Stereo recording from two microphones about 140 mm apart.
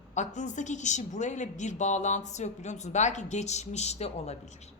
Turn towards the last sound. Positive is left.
turn(degrees=55)  # may be behind; listen again after turning